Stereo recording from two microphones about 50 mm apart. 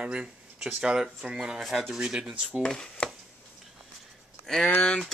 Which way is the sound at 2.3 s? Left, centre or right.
Right.